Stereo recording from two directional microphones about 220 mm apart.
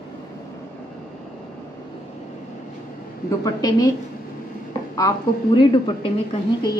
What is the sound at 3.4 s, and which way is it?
Speech, 15° left (ahead or behind).